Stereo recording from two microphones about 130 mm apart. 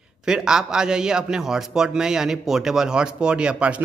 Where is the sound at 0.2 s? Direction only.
5° right (ahead or behind).